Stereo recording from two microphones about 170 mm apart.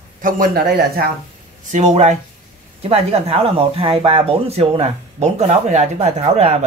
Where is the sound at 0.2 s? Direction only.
60° right (ahead or behind).